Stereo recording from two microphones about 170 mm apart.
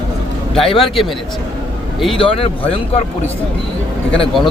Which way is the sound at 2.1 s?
30° left (ahead or behind).